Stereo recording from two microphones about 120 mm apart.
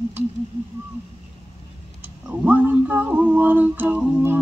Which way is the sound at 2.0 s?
15° right (ahead or behind).